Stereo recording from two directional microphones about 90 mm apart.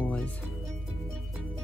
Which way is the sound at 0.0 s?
15° left (ahead or behind).